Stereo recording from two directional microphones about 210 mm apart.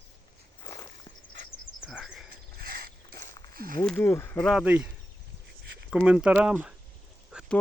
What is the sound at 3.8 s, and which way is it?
Speech, 10° left (ahead or behind).